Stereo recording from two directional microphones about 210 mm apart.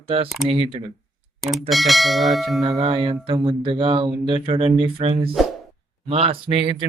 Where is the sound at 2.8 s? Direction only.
25° right (ahead or behind).